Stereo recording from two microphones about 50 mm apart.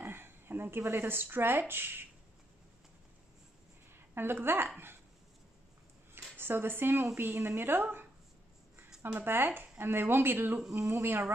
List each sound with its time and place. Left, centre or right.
0.0 s speech: right
3.9 s a woman's voice: right
6.1 s a sound: right
7.2 s speech: right
9.2 s speech: right